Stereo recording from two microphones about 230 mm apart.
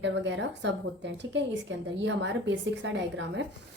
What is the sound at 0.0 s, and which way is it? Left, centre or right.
A woman's voice, right.